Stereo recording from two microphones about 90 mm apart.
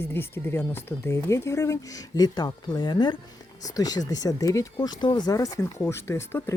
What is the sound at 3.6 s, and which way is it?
Speech, 45° left (ahead or behind).